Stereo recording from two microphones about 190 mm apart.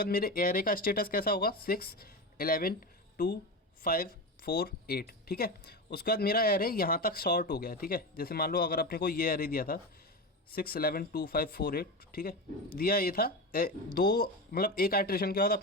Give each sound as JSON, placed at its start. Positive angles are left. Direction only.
{"t": 0.0, "sound": "speech", "side_deg": 50}
{"t": 3.8, "sound": "speech", "side_deg": 50}